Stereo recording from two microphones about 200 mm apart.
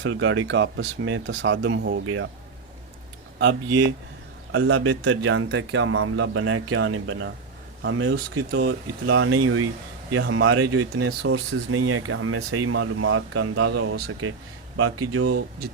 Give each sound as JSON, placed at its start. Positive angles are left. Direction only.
{"t": 0.0, "sound": "speech", "side_deg": -85}
{"t": 4.5, "sound": "speech", "side_deg": -90}